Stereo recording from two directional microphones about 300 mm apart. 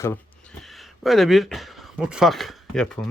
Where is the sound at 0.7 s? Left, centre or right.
Centre.